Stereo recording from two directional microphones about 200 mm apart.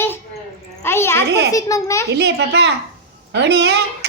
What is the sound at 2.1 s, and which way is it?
A child's voice, 55° right (ahead or behind).